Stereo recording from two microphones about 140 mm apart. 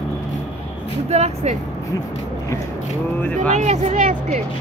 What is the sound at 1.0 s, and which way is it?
Speech, 50° right (ahead or behind).